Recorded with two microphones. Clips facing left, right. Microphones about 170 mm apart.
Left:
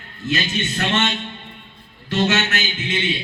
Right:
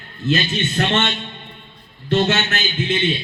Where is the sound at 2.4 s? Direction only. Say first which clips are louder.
Right 3 dB; 30° right (ahead or behind).